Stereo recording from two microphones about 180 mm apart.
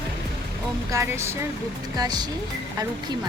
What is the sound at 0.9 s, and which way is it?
Speech, 15° right (ahead or behind).